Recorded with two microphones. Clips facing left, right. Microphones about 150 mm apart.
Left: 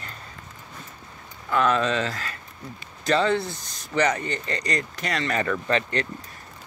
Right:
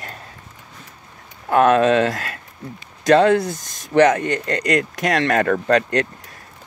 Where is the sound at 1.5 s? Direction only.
55° right (ahead or behind).